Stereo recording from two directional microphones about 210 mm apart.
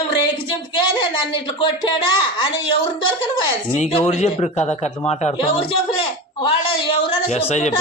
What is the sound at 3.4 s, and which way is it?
A woman's voice, 25° left (ahead or behind).